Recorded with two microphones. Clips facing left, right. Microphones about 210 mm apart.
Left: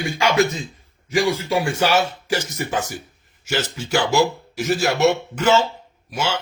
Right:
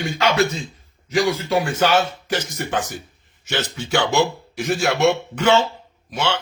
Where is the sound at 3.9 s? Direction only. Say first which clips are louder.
Left 1 dB; 5° left (ahead or behind).